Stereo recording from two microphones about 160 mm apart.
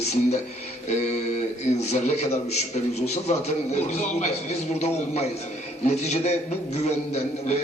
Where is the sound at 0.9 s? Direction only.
45° left (ahead or behind).